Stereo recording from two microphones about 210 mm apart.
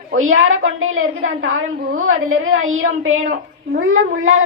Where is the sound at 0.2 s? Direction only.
70° right (ahead or behind).